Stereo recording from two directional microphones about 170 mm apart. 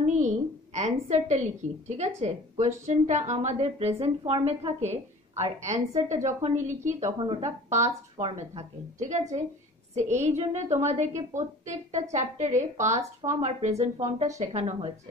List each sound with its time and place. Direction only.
0.0 s a woman's voice: 45° right (ahead or behind)
7.2 s a woman's voice: 30° right (ahead or behind)